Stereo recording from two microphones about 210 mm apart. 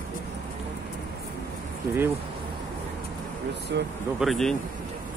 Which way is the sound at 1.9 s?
10° right (ahead or behind).